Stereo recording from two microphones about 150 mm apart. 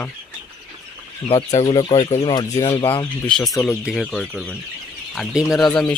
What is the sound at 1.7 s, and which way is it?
Speech, 30° left (ahead or behind).